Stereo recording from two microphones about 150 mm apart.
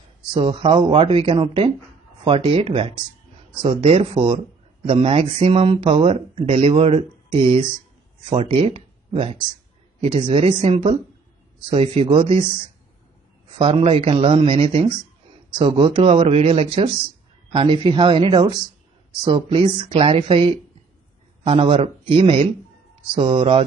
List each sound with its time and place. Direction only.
0.3 s speech: 35° right (ahead or behind)
13.6 s speech: 40° right (ahead or behind)